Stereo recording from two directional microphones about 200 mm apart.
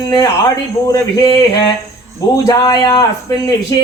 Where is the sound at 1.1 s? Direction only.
20° left (ahead or behind).